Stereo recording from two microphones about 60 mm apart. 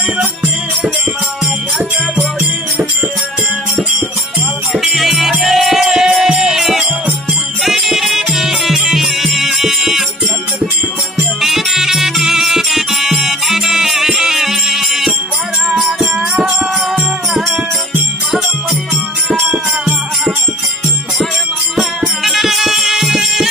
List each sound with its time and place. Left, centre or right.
4.7 s music: centre
11.4 s music: centre
15.7 s music: centre
22.2 s music: centre